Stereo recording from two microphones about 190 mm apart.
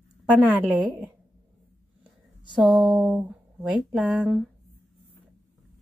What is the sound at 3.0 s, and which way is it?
Speech, 5° right (ahead or behind).